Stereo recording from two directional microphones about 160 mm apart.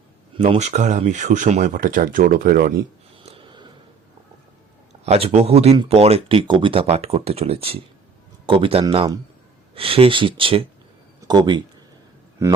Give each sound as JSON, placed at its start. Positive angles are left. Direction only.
{"t": 0.3, "sound": "speech", "side_deg": -40}
{"t": 3.2, "sound": "a sound", "side_deg": -35}
{"t": 5.0, "sound": "speech", "side_deg": -40}